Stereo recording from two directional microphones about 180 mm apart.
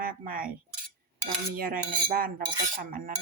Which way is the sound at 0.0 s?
50° right (ahead or behind).